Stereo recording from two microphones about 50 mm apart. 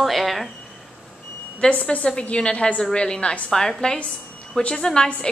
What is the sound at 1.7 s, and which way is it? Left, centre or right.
A woman's voice, left.